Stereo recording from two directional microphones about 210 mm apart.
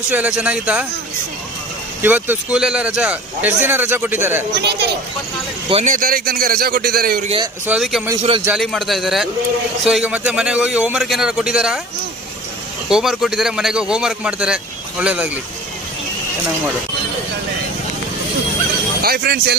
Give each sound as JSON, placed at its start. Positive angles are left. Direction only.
{"t": 0.1, "sound": "a man's voice", "side_deg": -5}
{"t": 2.0, "sound": "a man's voice", "side_deg": -10}
{"t": 4.6, "sound": "a man's voice", "side_deg": -50}
{"t": 5.7, "sound": "a man's voice", "side_deg": -35}
{"t": 7.6, "sound": "a man's voice", "side_deg": -5}
{"t": 12.9, "sound": "a man's voice", "side_deg": 0}
{"t": 18.9, "sound": "a man's voice", "side_deg": -45}